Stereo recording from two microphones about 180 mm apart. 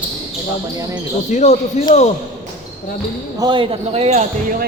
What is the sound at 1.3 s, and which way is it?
Speech, 40° left (ahead or behind).